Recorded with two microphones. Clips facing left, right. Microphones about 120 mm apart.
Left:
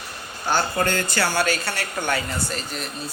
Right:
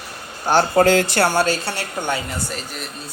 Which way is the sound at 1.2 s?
50° right (ahead or behind).